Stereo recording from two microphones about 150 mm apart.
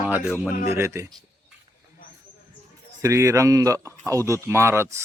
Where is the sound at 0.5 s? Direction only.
50° left (ahead or behind).